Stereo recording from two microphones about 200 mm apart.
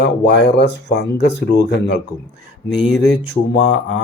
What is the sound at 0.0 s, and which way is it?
Speech, 60° left (ahead or behind).